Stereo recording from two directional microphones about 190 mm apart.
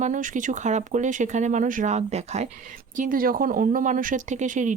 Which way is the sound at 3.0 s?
45° right (ahead or behind).